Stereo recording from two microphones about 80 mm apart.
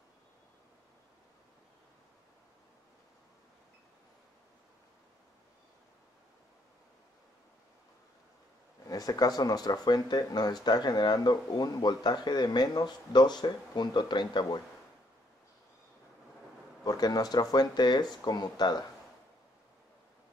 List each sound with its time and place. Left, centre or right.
8.8 s speech: left
16.8 s speech: left